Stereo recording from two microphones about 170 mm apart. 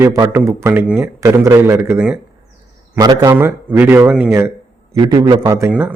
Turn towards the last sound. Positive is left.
turn(degrees=-10)  # may be behind; listen again after turning